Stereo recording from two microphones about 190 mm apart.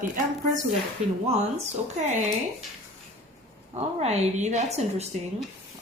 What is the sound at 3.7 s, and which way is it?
Speech, 35° right (ahead or behind).